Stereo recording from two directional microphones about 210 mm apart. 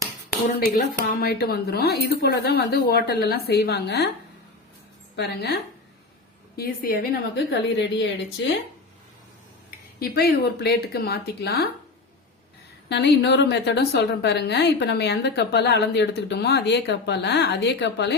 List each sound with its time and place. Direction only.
0.4 s a woman's voice: 45° left (ahead or behind)
5.1 s a woman's voice: 50° left (ahead or behind)
6.6 s a woman's voice: 45° left (ahead or behind)
10.0 s a woman's voice: 45° left (ahead or behind)
12.9 s a woman's voice: 55° left (ahead or behind)